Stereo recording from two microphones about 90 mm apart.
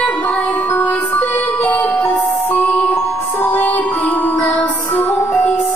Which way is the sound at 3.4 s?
20° left (ahead or behind).